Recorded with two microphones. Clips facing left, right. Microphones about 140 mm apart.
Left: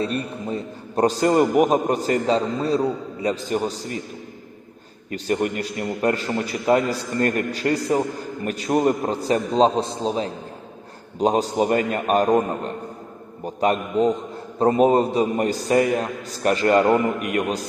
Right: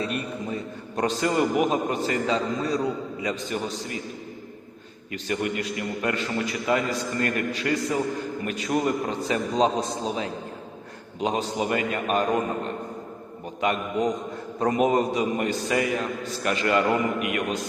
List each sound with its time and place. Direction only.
0.0 s a man's voice: 30° left (ahead or behind)
5.1 s a man's voice: 40° left (ahead or behind)